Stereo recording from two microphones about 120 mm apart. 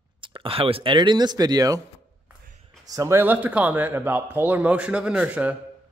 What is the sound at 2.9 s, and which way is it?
A man's voice, 25° right (ahead or behind).